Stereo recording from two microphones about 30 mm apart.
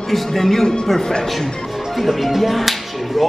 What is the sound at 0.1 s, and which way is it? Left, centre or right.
Speech, centre.